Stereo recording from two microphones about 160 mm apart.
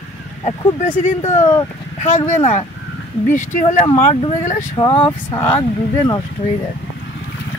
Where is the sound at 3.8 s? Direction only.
35° left (ahead or behind).